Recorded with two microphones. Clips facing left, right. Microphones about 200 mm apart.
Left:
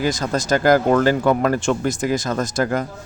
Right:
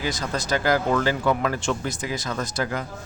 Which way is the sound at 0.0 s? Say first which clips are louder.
Left 6 dB; 45° left (ahead or behind).